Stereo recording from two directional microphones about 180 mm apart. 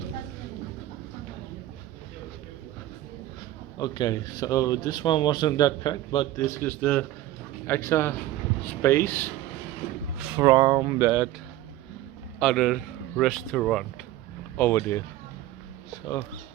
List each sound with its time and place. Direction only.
3.8 s speech: 25° left (ahead or behind)
10.2 s speech: 15° right (ahead or behind)
12.4 s a man's voice: centre (ahead or behind)